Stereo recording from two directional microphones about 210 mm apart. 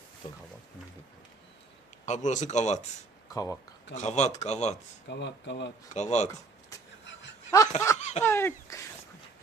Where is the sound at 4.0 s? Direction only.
35° left (ahead or behind).